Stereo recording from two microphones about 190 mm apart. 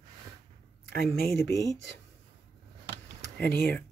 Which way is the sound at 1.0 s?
55° left (ahead or behind).